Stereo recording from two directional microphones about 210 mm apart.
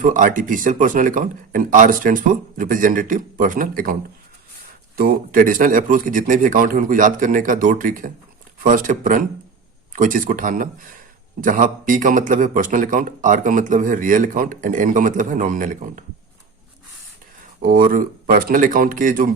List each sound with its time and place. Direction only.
0.0 s a man's voice: 40° right (ahead or behind)
4.9 s a man's voice: 40° right (ahead or behind)
17.6 s a man's voice: 40° right (ahead or behind)